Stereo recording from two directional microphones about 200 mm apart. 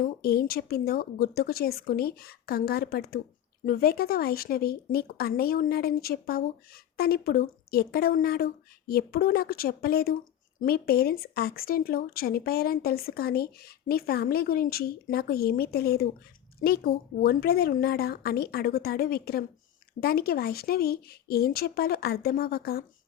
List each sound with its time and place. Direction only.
0.0 s speech: 50° left (ahead or behind)